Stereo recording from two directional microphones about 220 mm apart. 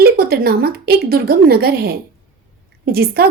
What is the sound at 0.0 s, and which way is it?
A woman's voice, 45° right (ahead or behind).